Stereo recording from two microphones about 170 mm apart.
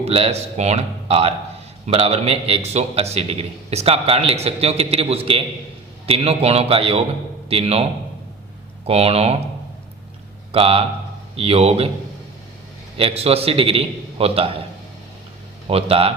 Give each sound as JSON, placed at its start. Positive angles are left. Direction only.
{"t": 0.0, "sound": "a man's voice", "side_deg": -35}
{"t": 10.5, "sound": "a man's voice", "side_deg": -35}
{"t": 13.0, "sound": "a man's voice", "side_deg": -35}
{"t": 15.7, "sound": "a man's voice", "side_deg": -35}